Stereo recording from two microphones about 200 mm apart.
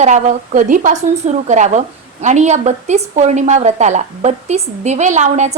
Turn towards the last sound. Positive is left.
turn(degrees=-35)  # may be behind; listen again after turning